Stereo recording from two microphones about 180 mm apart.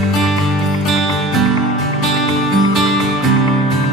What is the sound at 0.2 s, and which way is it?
Music, centre (ahead or behind).